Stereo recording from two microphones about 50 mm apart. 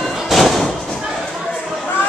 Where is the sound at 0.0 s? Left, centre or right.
Centre.